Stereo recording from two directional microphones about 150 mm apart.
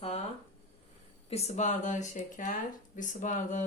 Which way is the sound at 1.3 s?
45° left (ahead or behind).